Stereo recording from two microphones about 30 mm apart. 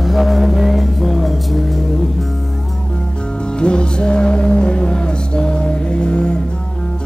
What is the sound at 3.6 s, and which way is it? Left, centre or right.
Music, left.